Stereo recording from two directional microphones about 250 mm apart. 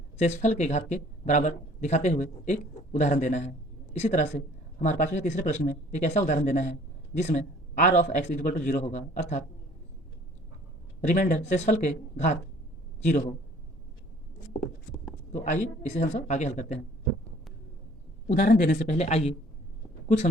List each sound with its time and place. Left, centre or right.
0.2 s speech: left
11.1 s speech: left
14.5 s writing: left
15.8 s speech: left
18.3 s speech: left